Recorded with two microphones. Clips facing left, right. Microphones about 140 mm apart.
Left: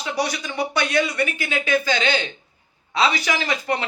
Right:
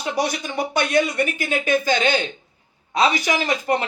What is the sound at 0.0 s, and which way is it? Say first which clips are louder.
Speech: right 2 dB; 50° right (ahead or behind).